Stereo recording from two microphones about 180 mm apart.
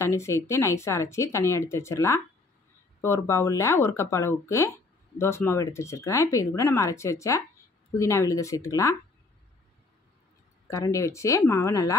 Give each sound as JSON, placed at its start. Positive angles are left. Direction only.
{"t": 0.0, "sound": "speech", "side_deg": 15}
{"t": 10.7, "sound": "speech", "side_deg": 15}